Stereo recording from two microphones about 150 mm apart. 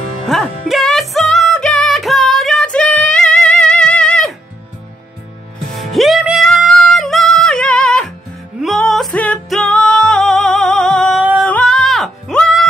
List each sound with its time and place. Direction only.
0.3 s music: centre (ahead or behind)
5.8 s music: centre (ahead or behind)